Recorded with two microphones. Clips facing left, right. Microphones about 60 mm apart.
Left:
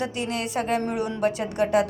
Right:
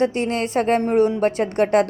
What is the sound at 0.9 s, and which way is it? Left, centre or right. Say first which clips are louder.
Speech: right 10 dB; right.